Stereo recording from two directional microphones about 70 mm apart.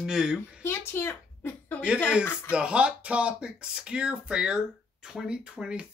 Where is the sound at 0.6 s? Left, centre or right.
Left.